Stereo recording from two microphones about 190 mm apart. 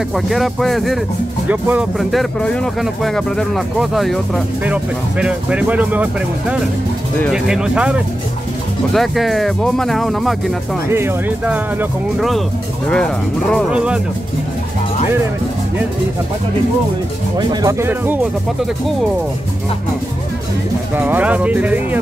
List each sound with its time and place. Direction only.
0.1 s speech: centre (ahead or behind)
7.4 s speech: 5° right (ahead or behind)
10.9 s speech: 10° right (ahead or behind)
17.4 s speech: 20° right (ahead or behind)
20.9 s speech: 10° right (ahead or behind)